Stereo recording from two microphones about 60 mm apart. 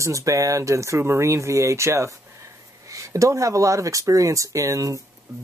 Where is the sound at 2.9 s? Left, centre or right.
Right.